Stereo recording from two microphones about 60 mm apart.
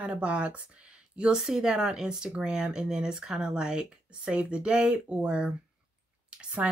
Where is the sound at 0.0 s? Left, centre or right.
Centre.